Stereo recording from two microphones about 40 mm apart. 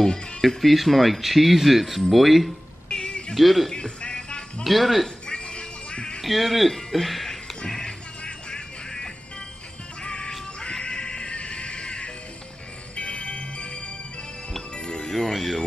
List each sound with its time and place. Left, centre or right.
0.6 s speech: centre
2.9 s a sound: centre
3.3 s speech: centre
3.7 s music: left
4.6 s speech: centre
5.2 s music: left
6.2 s speech: centre
7.6 s music: centre
15.0 s music: centre
15.3 s speech: centre